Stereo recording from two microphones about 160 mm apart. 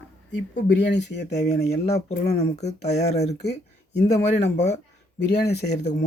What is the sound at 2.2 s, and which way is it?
Speech, 45° left (ahead or behind).